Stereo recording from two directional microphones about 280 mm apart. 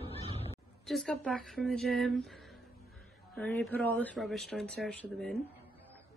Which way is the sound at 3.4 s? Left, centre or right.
Centre.